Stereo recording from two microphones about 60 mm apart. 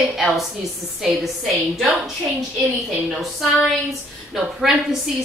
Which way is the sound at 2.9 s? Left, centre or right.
Centre.